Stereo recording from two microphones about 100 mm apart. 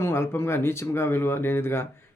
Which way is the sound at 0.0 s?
25° left (ahead or behind).